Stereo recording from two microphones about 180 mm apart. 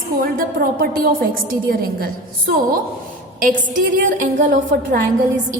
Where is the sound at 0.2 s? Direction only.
50° right (ahead or behind).